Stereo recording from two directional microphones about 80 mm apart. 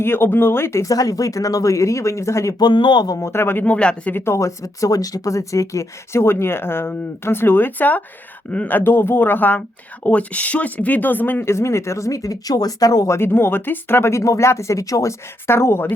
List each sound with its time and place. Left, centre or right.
0.0 s speech: left
2.6 s speech: left
3.2 s speech: left; by 4.1 s centre
4.1 s speech: left
13.1 s speech: left
15.4 s speech: left